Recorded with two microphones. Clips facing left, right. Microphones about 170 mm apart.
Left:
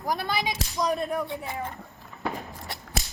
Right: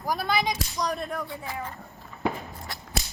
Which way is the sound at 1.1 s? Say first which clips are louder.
Left 3 dB; 20° left (ahead or behind).